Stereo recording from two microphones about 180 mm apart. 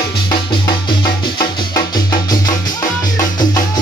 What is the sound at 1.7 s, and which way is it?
Music, 20° left (ahead or behind).